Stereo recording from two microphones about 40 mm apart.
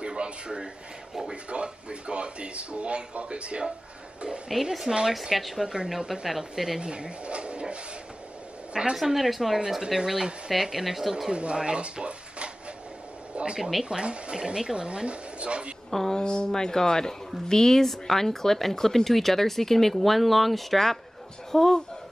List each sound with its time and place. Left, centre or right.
0.0 s a sound: right
1.3 s speech: right
4.5 s speech: centre
5.7 s speech: centre
6.8 s speech: right
8.9 s speech: centre
11.2 s speech: right
13.3 s a sound: right
13.8 s speech: right
15.9 s speech: centre
16.2 s speech: centre